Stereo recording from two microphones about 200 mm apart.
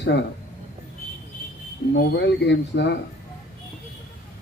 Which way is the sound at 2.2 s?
60° left (ahead or behind).